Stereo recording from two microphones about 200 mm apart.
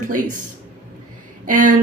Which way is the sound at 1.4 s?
40° right (ahead or behind).